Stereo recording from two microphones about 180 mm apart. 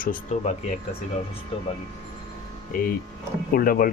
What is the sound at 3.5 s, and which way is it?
Speech, 50° left (ahead or behind).